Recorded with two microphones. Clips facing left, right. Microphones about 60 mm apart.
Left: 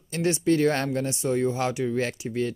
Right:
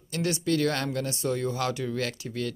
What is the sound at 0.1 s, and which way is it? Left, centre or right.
Speech, left.